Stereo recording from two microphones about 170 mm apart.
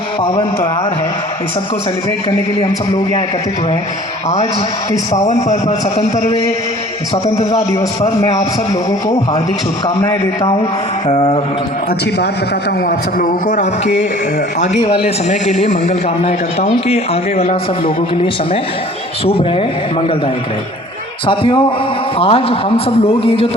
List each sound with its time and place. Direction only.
5.2 s a man's voice: 40° left (ahead or behind)
7.3 s a man's voice: 20° left (ahead or behind)
8.0 s a man's voice: 40° left (ahead or behind)
11.1 s a man's voice: 40° left (ahead or behind)
13.1 s a man's voice: 50° left (ahead or behind); by 17.9 s 35° left (ahead or behind)
19.2 s a man's voice: 35° left (ahead or behind)
21.2 s a man's voice: 30° left (ahead or behind)